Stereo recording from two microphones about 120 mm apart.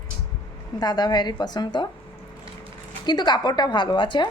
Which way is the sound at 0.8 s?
35° left (ahead or behind).